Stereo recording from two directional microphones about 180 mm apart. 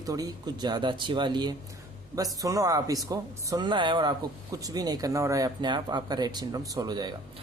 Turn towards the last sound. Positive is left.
turn(degrees=-25)  # may be behind; listen again after turning